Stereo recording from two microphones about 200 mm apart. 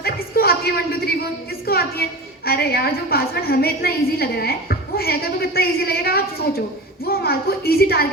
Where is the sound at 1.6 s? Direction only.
50° left (ahead or behind).